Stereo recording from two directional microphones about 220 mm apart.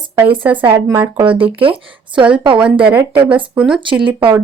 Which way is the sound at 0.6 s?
10° right (ahead or behind).